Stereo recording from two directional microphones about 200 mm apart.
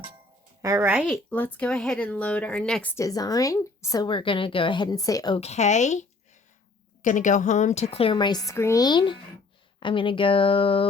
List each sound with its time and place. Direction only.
0.6 s speech: 15° right (ahead or behind)
1.0 s speech: 10° left (ahead or behind)
5.4 s a woman's voice: 35° left (ahead or behind)